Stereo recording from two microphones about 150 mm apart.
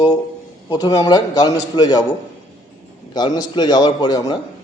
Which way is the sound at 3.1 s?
25° left (ahead or behind).